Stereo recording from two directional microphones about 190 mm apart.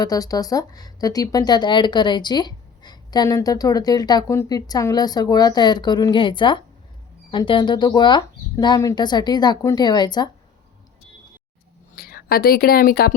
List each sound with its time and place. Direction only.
0.0 s speech: 20° left (ahead or behind)
11.9 s a woman's voice: 50° left (ahead or behind)